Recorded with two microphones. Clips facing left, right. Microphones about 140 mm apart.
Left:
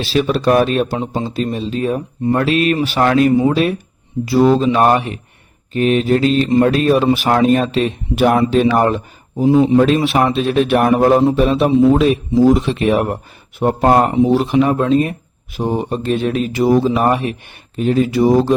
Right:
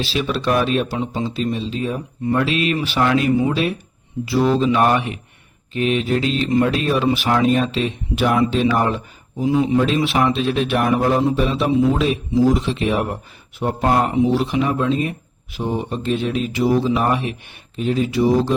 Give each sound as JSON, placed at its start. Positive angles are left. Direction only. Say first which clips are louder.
{"t": 0.0, "sound": "a man's voice", "louder": "left 6 dB", "side_deg": 45}
{"t": 9.7, "sound": "a man's voice", "louder": "left 5 dB", "side_deg": 50}